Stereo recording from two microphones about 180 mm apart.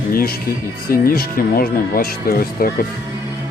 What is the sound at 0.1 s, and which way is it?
Speech, 55° left (ahead or behind).